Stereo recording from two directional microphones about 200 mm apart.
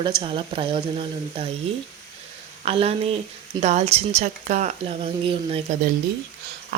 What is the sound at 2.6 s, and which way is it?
A woman's voice, 30° right (ahead or behind).